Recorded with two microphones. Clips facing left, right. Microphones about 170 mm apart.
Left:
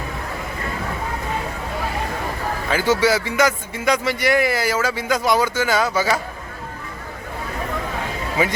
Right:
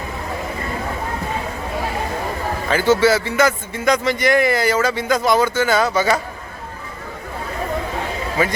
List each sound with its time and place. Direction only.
2.6 s a man's voice: 10° left (ahead or behind)
8.4 s a man's voice: 15° left (ahead or behind)